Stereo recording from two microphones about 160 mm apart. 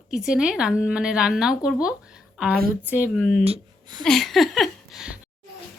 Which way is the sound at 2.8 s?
10° right (ahead or behind).